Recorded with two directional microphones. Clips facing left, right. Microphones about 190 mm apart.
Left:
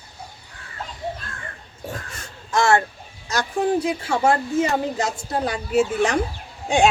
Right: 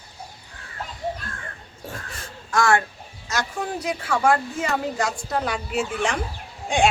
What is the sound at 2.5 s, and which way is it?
A woman's voice, 25° left (ahead or behind).